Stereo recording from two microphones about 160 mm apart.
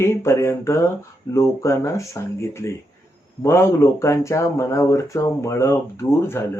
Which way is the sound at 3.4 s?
15° left (ahead or behind).